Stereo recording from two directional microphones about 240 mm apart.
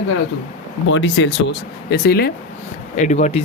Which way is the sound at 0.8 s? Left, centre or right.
Left.